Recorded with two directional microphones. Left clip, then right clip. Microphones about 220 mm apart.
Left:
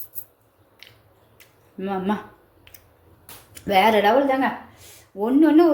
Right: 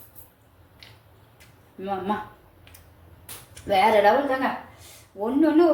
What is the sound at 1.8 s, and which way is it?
Speech, 35° left (ahead or behind).